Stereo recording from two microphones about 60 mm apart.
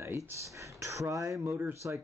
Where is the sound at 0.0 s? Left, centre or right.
Right.